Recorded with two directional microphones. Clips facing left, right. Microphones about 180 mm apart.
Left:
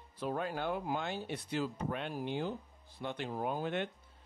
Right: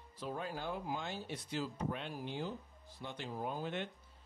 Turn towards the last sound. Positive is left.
turn(degrees=60)  # may be behind; listen again after turning